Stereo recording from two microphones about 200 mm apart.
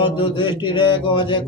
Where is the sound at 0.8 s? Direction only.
25° left (ahead or behind).